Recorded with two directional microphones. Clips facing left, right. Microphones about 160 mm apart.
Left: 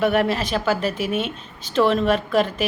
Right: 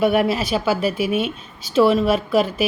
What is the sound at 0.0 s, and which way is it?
Speech, 10° right (ahead or behind).